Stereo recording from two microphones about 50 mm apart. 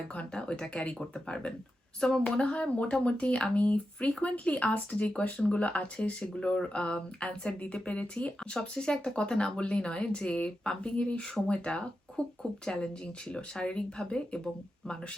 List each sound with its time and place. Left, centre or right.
0.2 s speech: centre